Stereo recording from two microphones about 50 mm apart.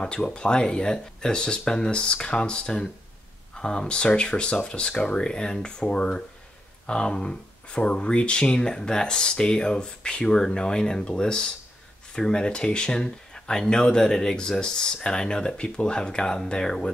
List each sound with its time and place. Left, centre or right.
0.0 s speech: centre